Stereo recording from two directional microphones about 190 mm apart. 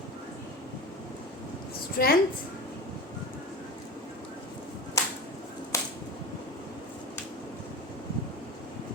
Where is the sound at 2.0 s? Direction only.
50° left (ahead or behind).